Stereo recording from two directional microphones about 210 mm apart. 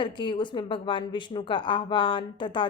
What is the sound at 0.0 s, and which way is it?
A woman's voice, 25° left (ahead or behind).